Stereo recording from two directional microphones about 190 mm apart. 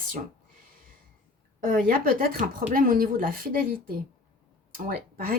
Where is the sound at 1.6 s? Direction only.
45° right (ahead or behind).